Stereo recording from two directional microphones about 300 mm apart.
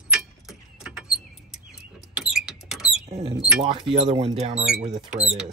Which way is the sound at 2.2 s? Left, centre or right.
Centre.